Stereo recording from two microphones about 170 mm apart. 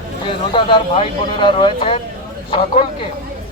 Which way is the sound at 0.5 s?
30° left (ahead or behind).